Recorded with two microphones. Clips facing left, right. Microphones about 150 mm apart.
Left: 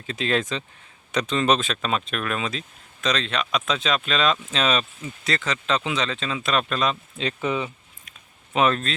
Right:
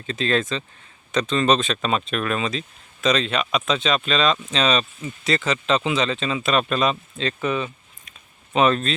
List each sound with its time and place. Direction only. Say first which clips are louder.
0.1 s speech: right 2 dB; 10° left (ahead or behind); by 6.9 s 5° right (ahead or behind)
7.2 s speech: even; 15° left (ahead or behind)
8.5 s speech: right 3 dB; centre (ahead or behind)